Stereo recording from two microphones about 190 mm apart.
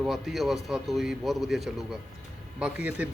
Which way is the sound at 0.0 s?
Centre (ahead or behind).